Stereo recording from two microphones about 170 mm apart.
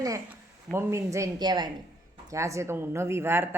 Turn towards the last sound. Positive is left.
turn(degrees=-15)  # may be behind; listen again after turning